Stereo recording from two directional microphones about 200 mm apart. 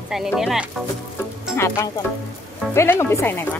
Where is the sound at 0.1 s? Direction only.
5° right (ahead or behind).